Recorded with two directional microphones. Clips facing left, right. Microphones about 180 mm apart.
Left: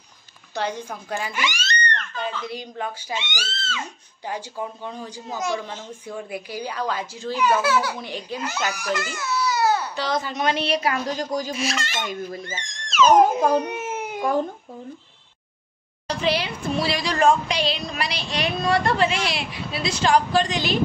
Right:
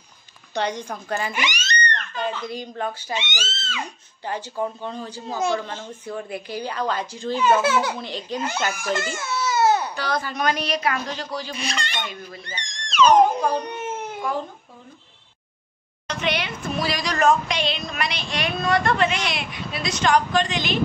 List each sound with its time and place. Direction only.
0.6 s a woman's voice: 5° left (ahead or behind)
1.3 s a sound: 20° right (ahead or behind)
2.6 s a woman's voice: 10° left (ahead or behind)
3.2 s speech: 20° right (ahead or behind)
4.2 s a woman's voice: 10° left (ahead or behind)
7.3 s speech: 25° right (ahead or behind)
8.0 s a woman's voice: 10° left (ahead or behind)
8.7 s baby cry: 25° right (ahead or behind)
9.9 s a woman's voice: 20° left (ahead or behind); by 11.5 s 40° left (ahead or behind)
11.5 s a woman's voice: 5° left (ahead or behind)
16.1 s speech: 30° left (ahead or behind)